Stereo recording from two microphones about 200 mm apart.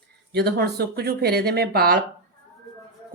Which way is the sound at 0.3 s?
55° right (ahead or behind).